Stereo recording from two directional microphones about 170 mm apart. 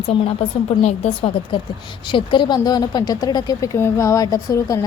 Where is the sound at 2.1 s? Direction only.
30° left (ahead or behind).